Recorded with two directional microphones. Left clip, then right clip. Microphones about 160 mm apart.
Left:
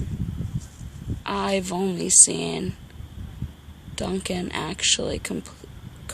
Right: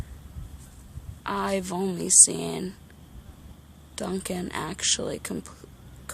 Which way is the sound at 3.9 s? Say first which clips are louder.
Left 3 dB; centre (ahead or behind).